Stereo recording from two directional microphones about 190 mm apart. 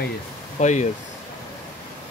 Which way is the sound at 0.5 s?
40° left (ahead or behind).